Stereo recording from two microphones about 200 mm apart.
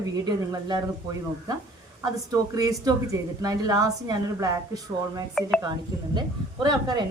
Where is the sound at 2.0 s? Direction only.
15° right (ahead or behind).